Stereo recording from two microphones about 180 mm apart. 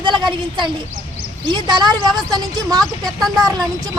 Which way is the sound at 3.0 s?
Centre (ahead or behind).